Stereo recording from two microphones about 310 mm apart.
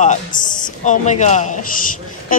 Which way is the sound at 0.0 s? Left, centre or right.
Centre.